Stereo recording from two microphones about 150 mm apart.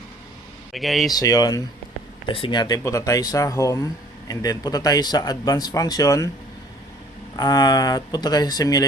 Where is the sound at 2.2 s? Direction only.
35° left (ahead or behind).